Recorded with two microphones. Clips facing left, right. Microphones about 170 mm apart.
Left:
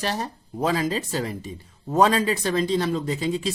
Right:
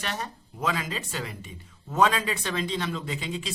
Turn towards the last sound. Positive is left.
turn(degrees=40)  # may be behind; listen again after turning